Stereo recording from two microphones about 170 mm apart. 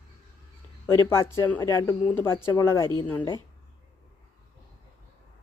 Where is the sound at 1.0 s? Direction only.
15° left (ahead or behind).